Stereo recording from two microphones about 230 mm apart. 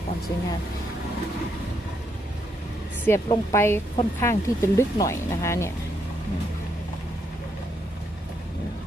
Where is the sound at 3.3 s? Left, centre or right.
Centre.